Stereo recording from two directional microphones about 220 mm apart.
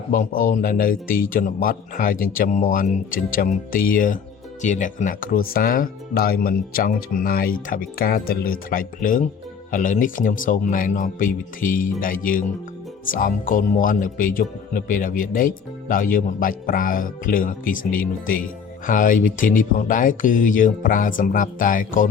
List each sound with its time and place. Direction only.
0.1 s speech: 40° left (ahead or behind)